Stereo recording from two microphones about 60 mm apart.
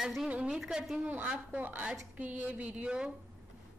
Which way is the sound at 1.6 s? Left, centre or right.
Right.